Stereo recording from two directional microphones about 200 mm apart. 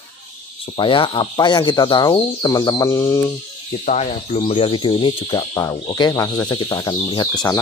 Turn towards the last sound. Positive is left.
turn(degrees=20)  # may be behind; listen again after turning